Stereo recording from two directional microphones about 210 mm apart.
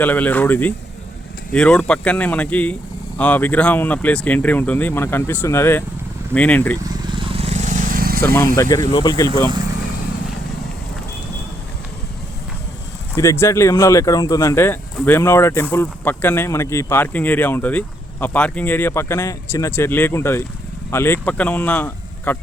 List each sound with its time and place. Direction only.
0.0 s speech: 10° left (ahead or behind)
7.2 s vehicle: 25° right (ahead or behind); by 8.2 s 45° right (ahead or behind)
8.7 s speech: 15° left (ahead or behind)
13.1 s speech: 15° left (ahead or behind)